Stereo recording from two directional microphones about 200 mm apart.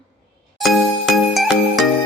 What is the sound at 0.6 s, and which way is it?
Music, centre (ahead or behind).